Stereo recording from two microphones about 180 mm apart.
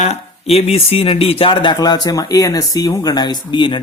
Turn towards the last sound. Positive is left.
turn(degrees=25)  # may be behind; listen again after turning